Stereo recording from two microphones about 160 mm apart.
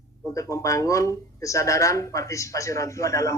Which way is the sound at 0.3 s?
20° left (ahead or behind).